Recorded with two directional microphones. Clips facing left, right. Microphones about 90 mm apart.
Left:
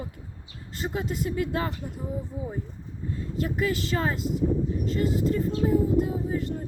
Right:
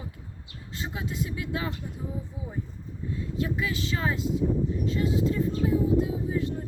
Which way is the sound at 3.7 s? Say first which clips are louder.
Left 3 dB; 45° left (ahead or behind).